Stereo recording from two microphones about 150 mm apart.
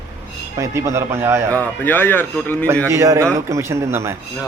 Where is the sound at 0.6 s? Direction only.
20° right (ahead or behind).